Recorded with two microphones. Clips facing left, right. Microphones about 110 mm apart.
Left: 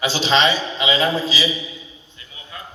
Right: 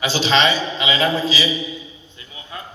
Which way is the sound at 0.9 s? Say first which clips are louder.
Right 2 dB; 10° left (ahead or behind).